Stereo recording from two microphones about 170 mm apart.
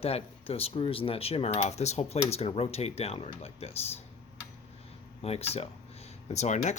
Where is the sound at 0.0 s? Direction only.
35° left (ahead or behind).